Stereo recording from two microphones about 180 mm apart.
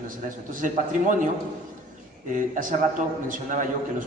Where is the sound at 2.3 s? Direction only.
50° right (ahead or behind).